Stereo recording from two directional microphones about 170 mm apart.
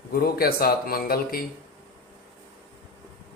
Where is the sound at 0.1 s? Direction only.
60° left (ahead or behind).